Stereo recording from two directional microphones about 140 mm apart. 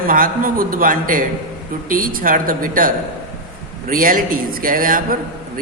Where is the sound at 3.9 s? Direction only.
90° right.